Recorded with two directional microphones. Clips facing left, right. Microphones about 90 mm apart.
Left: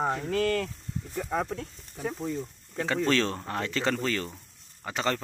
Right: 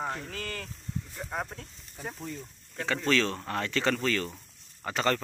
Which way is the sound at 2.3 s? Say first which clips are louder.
Left 7 dB; 25° left (ahead or behind).